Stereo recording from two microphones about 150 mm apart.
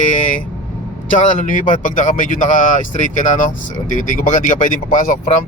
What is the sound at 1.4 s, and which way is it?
Speech, 60° left (ahead or behind).